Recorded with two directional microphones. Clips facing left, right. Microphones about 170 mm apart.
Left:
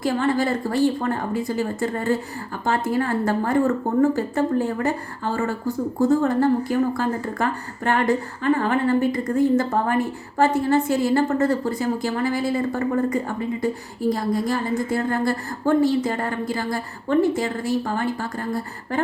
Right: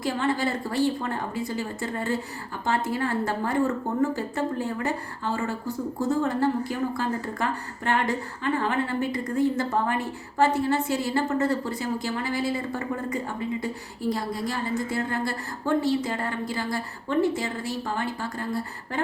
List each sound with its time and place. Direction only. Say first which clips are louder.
0.0 s a woman's voice: left 5 dB; 45° left (ahead or behind)